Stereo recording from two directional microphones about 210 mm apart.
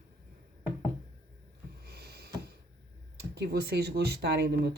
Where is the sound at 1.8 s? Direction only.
50° right (ahead or behind).